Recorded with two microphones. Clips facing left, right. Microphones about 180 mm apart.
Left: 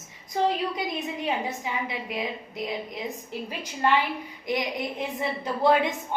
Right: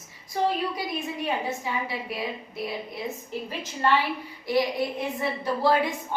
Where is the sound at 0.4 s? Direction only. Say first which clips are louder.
Even; 20° left (ahead or behind).